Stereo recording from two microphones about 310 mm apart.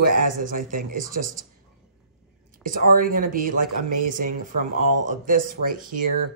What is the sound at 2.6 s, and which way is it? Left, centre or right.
Speech, right.